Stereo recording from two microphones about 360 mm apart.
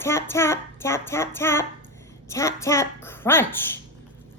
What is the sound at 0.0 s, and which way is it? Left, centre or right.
A woman's voice, centre.